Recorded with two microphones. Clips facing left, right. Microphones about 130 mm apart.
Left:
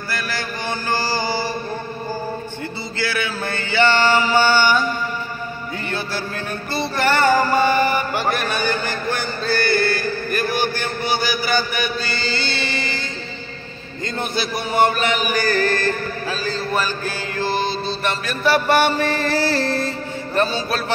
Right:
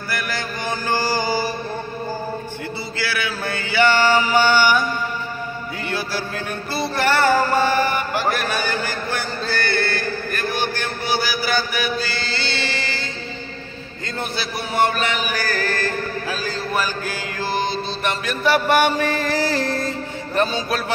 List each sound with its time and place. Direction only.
0.1 s mantra: 15° right (ahead or behind)
3.0 s chant: 5° right (ahead or behind)
5.9 s music: 5° right (ahead or behind)
6.7 s mantra: 5° right (ahead or behind)
14.0 s chant: centre (ahead or behind)